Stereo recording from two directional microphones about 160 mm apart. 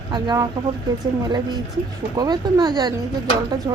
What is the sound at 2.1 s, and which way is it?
Speech, 25° right (ahead or behind).